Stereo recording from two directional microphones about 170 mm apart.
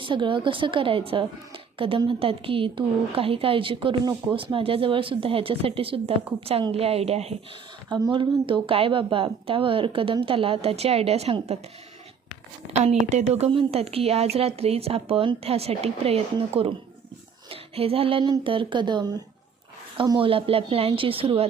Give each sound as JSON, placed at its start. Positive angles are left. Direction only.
{"t": 0.0, "sound": "a woman's voice", "side_deg": -30}
{"t": 7.9, "sound": "a woman's voice", "side_deg": -25}
{"t": 12.8, "sound": "a woman's voice", "side_deg": -40}